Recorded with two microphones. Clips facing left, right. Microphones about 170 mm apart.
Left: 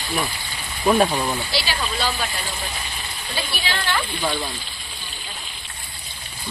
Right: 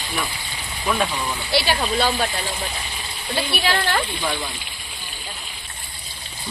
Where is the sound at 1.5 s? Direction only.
60° right (ahead or behind).